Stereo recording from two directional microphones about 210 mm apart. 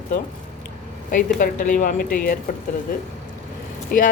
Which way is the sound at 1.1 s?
40° left (ahead or behind).